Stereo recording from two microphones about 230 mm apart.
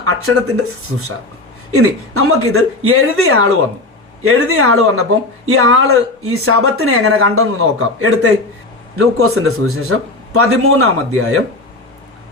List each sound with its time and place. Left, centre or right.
0.0 s speech: right
1.7 s speech: right